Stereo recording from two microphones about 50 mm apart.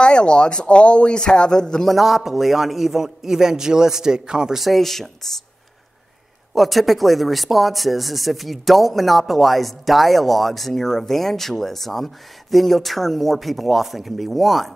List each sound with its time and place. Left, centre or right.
0.0 s a man's voice: centre
1.9 s a man's voice: centre
4.6 s speech: centre
6.5 s speech: centre